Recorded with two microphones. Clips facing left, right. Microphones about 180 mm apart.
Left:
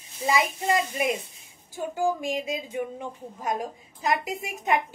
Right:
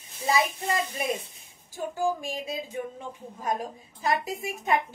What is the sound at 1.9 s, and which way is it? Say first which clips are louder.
A woman's voice: left 3 dB; 15° left (ahead or behind).